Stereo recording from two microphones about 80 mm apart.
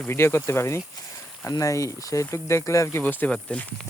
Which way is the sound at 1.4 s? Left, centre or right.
Left.